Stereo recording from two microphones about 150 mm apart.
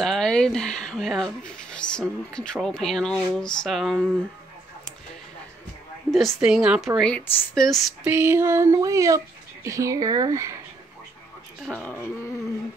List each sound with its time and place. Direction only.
0.0 s speech: 5° left (ahead or behind)
6.1 s speech: centre (ahead or behind)
8.0 s speech: 15° right (ahead or behind)
11.8 s speech: 10° left (ahead or behind)